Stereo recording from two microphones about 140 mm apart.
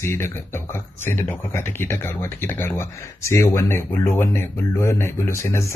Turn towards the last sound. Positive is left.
turn(degrees=20)  # may be behind; listen again after turning